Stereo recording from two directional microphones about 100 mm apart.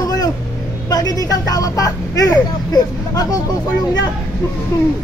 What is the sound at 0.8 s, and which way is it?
Speech, 40° left (ahead or behind).